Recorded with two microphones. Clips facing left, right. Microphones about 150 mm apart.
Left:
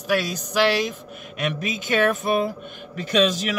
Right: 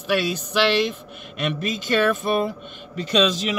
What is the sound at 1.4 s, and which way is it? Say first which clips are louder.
Speech: right 1 dB; 50° left (ahead or behind).